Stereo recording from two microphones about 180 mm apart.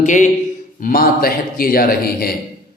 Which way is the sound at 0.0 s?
45° left (ahead or behind).